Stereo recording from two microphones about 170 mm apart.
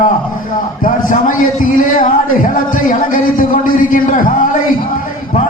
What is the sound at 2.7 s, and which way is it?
A man's voice, 50° left (ahead or behind).